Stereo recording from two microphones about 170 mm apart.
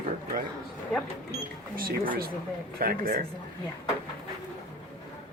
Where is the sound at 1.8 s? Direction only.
60° right (ahead or behind).